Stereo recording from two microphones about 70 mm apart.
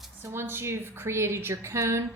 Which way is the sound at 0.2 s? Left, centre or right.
Right.